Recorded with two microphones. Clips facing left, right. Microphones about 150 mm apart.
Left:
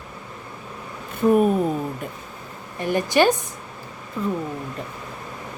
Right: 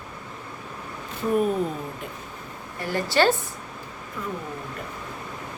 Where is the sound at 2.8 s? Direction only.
20° left (ahead or behind).